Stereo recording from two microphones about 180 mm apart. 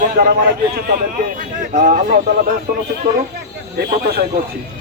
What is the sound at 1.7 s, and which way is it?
Speech, 45° right (ahead or behind).